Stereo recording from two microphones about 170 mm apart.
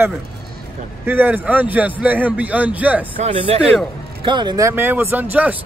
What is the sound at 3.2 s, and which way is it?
A man's voice, 30° right (ahead or behind).